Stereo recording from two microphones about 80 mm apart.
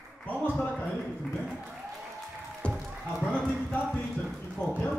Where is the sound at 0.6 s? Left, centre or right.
Left.